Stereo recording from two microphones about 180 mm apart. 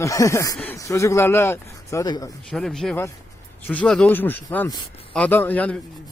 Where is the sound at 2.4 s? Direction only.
Centre (ahead or behind).